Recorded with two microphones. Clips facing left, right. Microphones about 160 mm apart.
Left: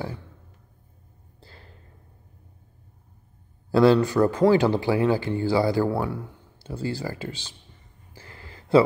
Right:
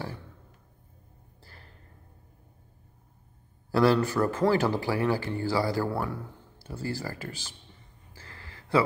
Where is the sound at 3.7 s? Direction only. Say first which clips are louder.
Left 5 dB; 20° left (ahead or behind).